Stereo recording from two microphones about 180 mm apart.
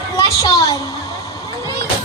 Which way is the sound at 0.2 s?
20° left (ahead or behind).